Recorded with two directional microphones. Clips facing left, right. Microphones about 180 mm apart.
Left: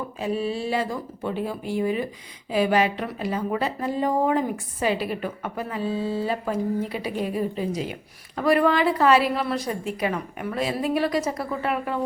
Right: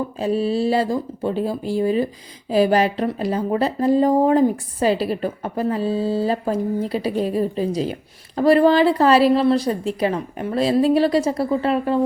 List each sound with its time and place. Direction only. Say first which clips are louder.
0.2 s speech: right 6 dB; 35° right (ahead or behind)